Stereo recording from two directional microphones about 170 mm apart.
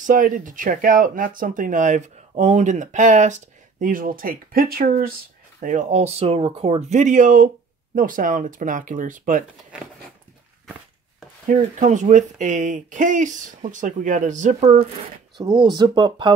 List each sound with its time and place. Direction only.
0.0 s speech: 50° right (ahead or behind)
5.6 s speech: 50° right (ahead or behind)
11.4 s speech: 50° right (ahead or behind)
15.4 s speech: 20° right (ahead or behind)